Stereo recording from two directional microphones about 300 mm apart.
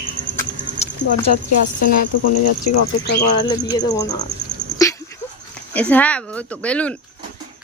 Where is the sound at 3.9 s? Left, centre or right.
Centre.